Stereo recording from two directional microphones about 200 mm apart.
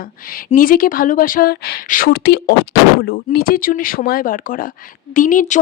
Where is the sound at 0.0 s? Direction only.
45° left (ahead or behind).